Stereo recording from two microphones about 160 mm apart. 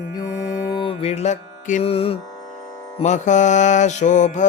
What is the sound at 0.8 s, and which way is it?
Music, 35° left (ahead or behind).